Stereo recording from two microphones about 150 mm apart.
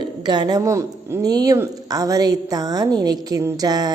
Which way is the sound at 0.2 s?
30° right (ahead or behind).